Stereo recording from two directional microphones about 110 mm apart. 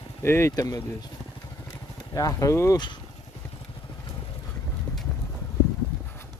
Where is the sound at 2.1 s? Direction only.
30° left (ahead or behind).